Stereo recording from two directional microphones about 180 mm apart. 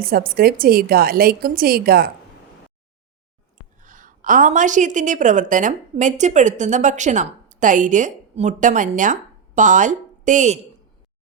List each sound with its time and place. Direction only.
0.0 s a woman's voice: 55° right (ahead or behind)
3.8 s a woman's voice: 45° right (ahead or behind)